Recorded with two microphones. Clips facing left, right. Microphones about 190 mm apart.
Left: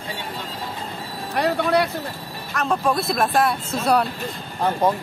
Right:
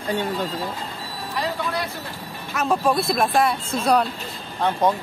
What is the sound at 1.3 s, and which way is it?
Speech, 65° left (ahead or behind).